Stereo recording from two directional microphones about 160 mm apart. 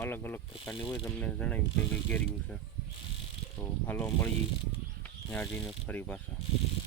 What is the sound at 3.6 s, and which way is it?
Speech, 10° left (ahead or behind).